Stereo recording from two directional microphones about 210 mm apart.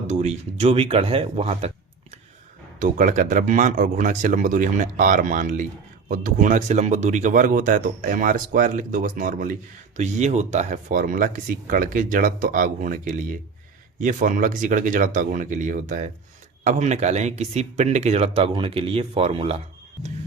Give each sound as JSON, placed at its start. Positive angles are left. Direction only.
{"t": 0.1, "sound": "speech", "side_deg": -30}